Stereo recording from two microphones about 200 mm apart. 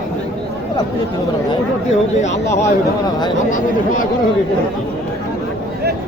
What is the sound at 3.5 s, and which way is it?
Speech, 40° left (ahead or behind).